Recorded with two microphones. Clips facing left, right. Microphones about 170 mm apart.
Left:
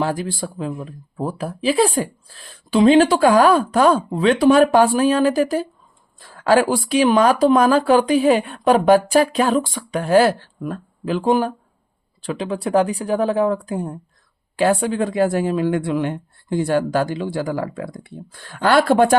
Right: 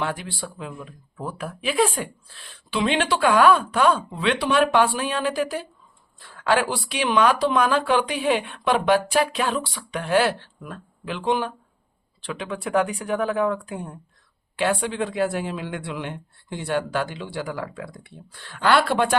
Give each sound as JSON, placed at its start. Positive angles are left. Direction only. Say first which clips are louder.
{"t": 0.0, "sound": "speech", "louder": "left 6 dB", "side_deg": 40}